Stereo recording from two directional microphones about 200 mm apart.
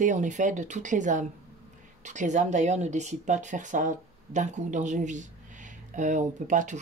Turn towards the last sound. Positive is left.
turn(degrees=-40)  # may be behind; listen again after turning